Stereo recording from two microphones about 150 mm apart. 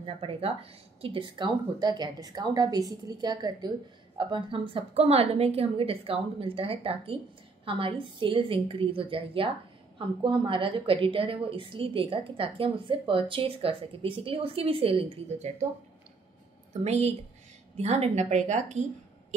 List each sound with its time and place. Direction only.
0.0 s a woman's voice: 35° right (ahead or behind)
16.8 s a woman's voice: 45° right (ahead or behind)